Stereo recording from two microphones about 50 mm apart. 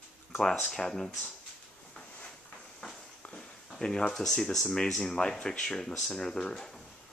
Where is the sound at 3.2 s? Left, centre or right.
Centre.